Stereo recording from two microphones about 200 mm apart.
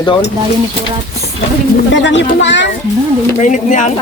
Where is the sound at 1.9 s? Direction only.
65° left (ahead or behind).